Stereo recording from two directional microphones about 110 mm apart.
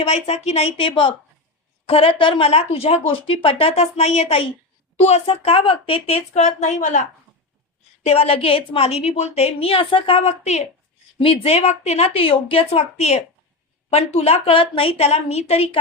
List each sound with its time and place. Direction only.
0.0 s a woman's voice: 75° left (ahead or behind)
0.8 s a woman's voice: 50° left (ahead or behind); by 7.0 s 90° left
8.0 s a woman's voice: 65° left (ahead or behind); by 10.6 s 85° left
11.2 s a woman's voice: 60° left (ahead or behind); by 13.2 s 80° left
13.9 s a woman's voice: 70° left (ahead or behind)